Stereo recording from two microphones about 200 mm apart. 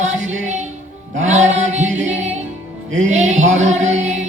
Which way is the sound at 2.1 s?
35° right (ahead or behind).